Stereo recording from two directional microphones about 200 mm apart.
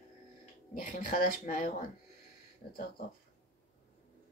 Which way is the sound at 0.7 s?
40° left (ahead or behind).